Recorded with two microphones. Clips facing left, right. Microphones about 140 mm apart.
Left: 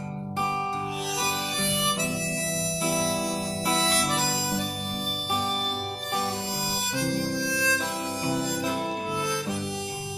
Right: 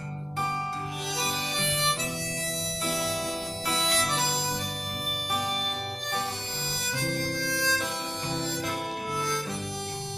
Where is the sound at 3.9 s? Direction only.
5° left (ahead or behind).